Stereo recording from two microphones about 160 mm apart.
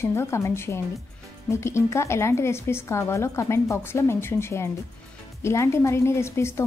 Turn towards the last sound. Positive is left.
turn(degrees=15)  # may be behind; listen again after turning